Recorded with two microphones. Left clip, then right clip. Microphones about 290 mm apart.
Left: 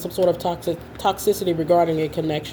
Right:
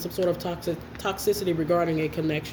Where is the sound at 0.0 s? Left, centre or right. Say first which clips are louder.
Left 6 dB; left.